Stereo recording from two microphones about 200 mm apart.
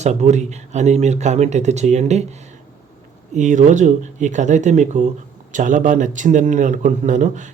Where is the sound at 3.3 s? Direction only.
35° right (ahead or behind).